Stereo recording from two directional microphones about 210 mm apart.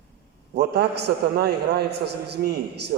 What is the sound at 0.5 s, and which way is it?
A man's voice, 50° right (ahead or behind).